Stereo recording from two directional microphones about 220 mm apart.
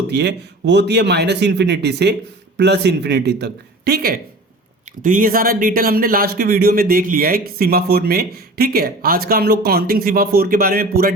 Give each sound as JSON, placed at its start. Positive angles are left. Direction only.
{"t": 0.1, "sound": "speech", "side_deg": -50}